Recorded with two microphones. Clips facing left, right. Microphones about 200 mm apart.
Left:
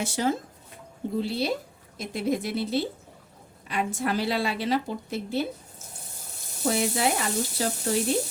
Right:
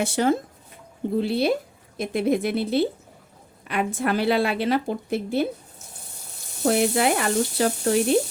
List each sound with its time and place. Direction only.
0.0 s a woman's voice: 60° right (ahead or behind)
6.7 s a woman's voice: 60° right (ahead or behind)